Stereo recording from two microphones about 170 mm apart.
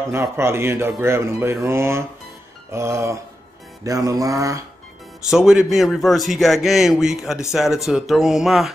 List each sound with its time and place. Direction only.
0.1 s speech: 15° right (ahead or behind)
3.8 s mantra: 20° right (ahead or behind)
5.3 s a man's voice: 5° right (ahead or behind)